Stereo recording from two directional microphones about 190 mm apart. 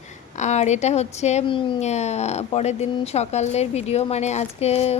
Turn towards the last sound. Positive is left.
turn(degrees=35)  # may be behind; listen again after turning